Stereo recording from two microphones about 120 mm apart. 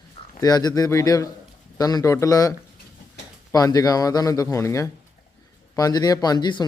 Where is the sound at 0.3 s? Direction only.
30° left (ahead or behind).